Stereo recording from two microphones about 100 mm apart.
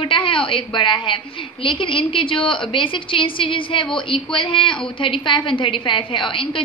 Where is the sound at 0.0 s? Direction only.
60° left (ahead or behind).